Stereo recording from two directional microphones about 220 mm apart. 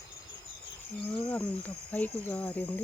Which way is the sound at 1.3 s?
5° left (ahead or behind).